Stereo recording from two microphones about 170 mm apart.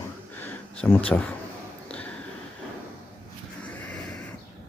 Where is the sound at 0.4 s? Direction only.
10° left (ahead or behind).